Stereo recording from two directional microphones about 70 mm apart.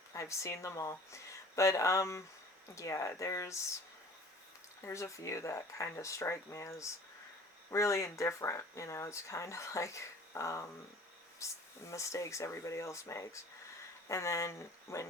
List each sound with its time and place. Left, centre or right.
0.1 s speech: left
4.9 s speech: left